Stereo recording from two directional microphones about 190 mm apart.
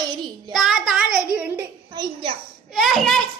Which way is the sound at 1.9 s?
20° right (ahead or behind).